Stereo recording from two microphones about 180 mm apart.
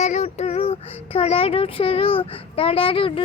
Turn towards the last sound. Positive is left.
turn(degrees=30)  # may be behind; listen again after turning